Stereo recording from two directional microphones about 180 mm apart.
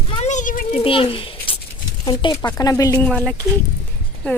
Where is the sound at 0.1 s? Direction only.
40° left (ahead or behind).